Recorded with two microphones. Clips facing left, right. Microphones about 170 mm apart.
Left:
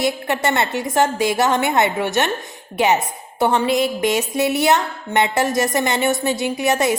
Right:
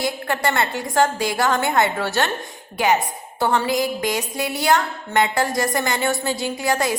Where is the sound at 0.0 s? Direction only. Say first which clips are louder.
Left 3 dB; 25° left (ahead or behind).